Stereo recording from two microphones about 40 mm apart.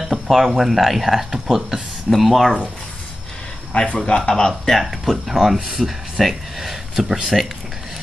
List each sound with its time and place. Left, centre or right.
0.0 s speech: centre
2.0 s speech: centre
3.7 s speech: left
4.6 s speech: centre